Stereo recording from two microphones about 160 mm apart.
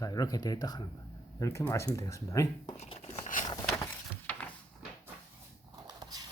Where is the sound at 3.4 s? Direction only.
25° left (ahead or behind); by 4.5 s 10° left (ahead or behind).